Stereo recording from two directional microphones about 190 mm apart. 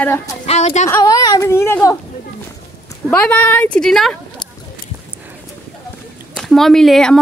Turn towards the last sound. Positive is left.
turn(degrees=5)  # may be behind; listen again after turning